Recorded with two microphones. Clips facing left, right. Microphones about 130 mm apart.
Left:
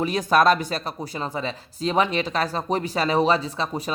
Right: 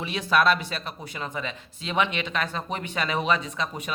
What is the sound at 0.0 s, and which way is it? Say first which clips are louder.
Speech: left 4 dB; 40° left (ahead or behind).